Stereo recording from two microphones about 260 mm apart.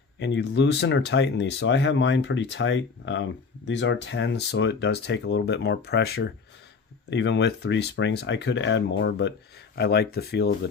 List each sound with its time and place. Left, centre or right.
0.2 s speech: left